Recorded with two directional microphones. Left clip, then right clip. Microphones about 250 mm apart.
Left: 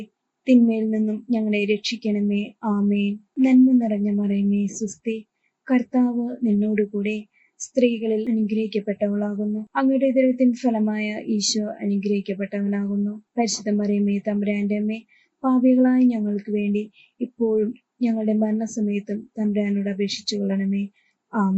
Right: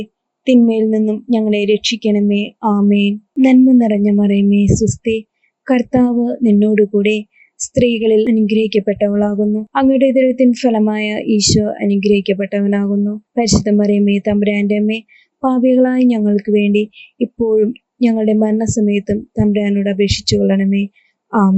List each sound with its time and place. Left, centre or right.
0.0 s a woman's voice: right